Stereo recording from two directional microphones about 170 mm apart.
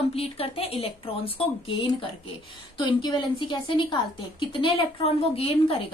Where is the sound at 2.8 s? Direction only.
25° left (ahead or behind).